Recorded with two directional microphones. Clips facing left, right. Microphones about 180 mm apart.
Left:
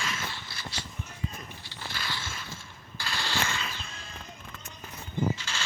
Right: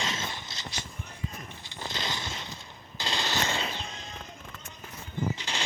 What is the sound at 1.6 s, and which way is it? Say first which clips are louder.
Machine gun: right 4 dB; 20° right (ahead or behind).